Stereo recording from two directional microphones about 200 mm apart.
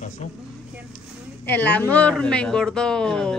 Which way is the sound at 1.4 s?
10° left (ahead or behind).